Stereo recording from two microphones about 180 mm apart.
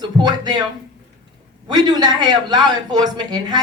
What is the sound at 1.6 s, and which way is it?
Speech, 25° right (ahead or behind).